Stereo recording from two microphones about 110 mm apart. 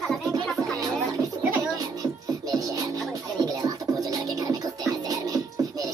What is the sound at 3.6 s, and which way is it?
Scratching, 35° right (ahead or behind).